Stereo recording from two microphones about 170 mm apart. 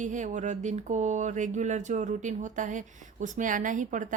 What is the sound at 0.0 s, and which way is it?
Speech, 45° right (ahead or behind).